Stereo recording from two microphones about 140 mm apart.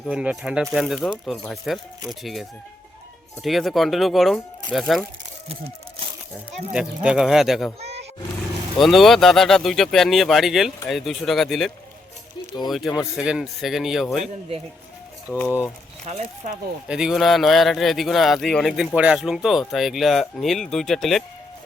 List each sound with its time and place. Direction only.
0.1 s speech: 5° right (ahead or behind)
6.7 s speech: 5° right (ahead or behind)
7.8 s roar: 50° right (ahead or behind)
8.8 s speech: centre (ahead or behind)
15.3 s speech: 20° left (ahead or behind)
16.0 s speech: 55° right (ahead or behind)
16.9 s speech: 5° right (ahead or behind)